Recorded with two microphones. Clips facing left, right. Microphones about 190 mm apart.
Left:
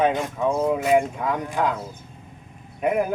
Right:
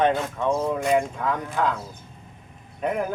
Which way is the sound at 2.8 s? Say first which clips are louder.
Left 4 dB; 10° left (ahead or behind).